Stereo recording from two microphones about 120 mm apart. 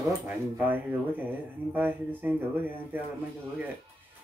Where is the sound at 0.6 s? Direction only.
15° right (ahead or behind).